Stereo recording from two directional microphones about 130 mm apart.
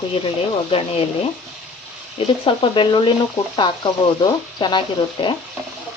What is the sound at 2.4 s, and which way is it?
Speech, 40° left (ahead or behind).